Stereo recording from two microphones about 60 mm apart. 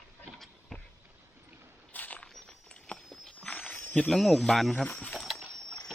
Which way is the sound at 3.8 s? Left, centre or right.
Left.